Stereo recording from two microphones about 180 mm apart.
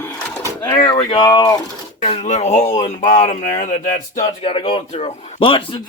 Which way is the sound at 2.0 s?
35° left (ahead or behind).